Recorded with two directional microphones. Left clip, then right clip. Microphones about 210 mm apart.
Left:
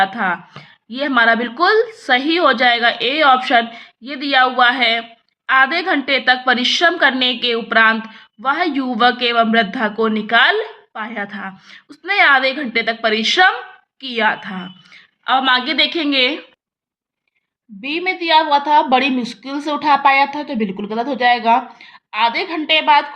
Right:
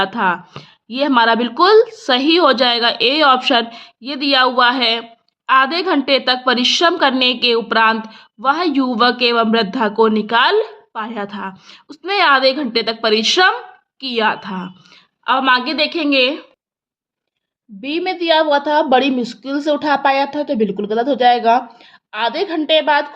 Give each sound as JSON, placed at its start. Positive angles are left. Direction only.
{"t": 0.0, "sound": "a woman's voice", "side_deg": -45}
{"t": 17.7, "sound": "a woman's voice", "side_deg": -45}